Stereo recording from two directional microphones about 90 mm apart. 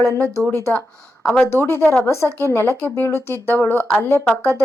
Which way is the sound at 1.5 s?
30° left (ahead or behind).